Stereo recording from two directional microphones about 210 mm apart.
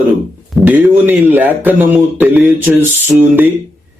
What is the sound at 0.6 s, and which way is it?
Mantra, 10° right (ahead or behind).